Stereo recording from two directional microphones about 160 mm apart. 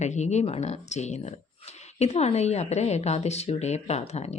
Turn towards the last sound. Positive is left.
turn(degrees=40)  # may be behind; listen again after turning